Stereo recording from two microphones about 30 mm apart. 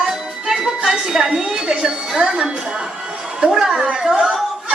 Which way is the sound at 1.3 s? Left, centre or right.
Right.